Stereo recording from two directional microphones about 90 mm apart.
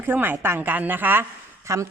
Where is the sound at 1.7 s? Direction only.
35° right (ahead or behind).